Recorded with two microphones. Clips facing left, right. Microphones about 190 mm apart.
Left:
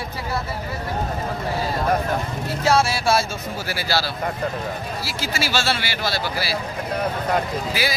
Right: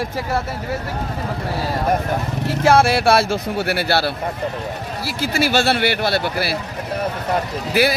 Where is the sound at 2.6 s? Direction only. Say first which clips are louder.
Right 5 dB; 55° right (ahead or behind).